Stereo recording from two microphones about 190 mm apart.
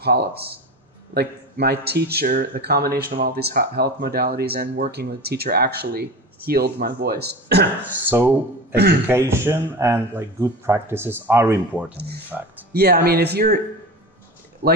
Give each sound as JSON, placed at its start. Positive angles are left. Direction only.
{"t": 0.0, "sound": "a man's voice", "side_deg": -55}
{"t": 8.1, "sound": "speech", "side_deg": -10}
{"t": 12.7, "sound": "a man's voice", "side_deg": -55}
{"t": 14.6, "sound": "speech", "side_deg": -55}